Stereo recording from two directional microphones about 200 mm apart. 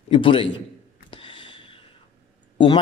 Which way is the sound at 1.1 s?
25° left (ahead or behind).